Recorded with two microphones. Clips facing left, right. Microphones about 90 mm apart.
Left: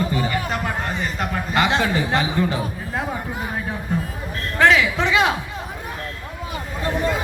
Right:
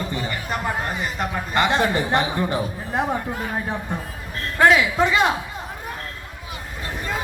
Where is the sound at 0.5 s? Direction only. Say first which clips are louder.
Even; 10° right (ahead or behind).